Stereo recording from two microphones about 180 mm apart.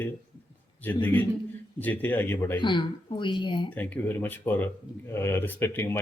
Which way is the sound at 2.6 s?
25° left (ahead or behind).